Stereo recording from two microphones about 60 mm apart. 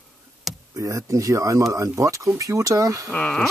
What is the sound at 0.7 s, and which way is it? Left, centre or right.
Speech, right.